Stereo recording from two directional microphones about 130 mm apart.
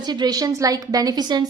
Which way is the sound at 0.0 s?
35° right (ahead or behind).